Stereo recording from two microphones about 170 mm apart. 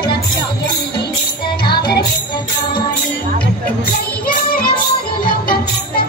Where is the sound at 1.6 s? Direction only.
25° left (ahead or behind).